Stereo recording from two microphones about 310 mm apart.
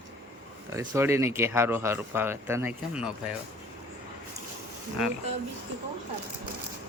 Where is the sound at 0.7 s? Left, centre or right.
Centre.